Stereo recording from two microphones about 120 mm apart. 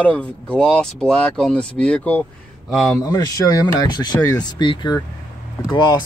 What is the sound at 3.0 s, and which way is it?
Speech, 30° left (ahead or behind).